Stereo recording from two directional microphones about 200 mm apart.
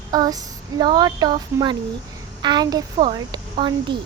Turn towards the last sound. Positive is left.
turn(degrees=-25)  # may be behind; listen again after turning